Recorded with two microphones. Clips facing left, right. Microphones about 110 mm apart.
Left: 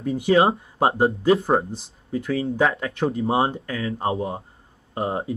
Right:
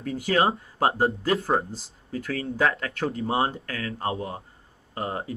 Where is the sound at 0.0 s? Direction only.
20° left (ahead or behind).